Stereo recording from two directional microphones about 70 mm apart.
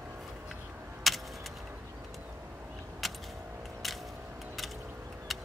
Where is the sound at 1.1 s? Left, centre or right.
Centre.